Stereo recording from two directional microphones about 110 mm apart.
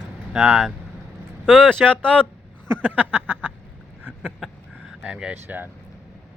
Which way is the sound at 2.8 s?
15° right (ahead or behind).